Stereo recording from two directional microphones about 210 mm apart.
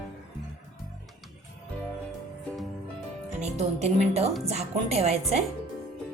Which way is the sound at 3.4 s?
30° right (ahead or behind).